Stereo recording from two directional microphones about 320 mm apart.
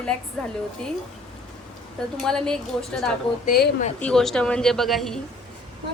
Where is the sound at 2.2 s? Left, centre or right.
Centre.